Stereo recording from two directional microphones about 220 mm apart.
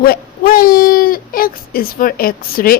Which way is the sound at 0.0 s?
40° left (ahead or behind).